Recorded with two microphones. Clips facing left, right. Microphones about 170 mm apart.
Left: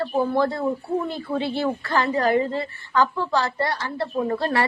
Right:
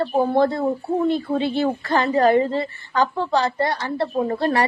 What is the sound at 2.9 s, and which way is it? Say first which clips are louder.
Speech: right 1 dB; 20° right (ahead or behind).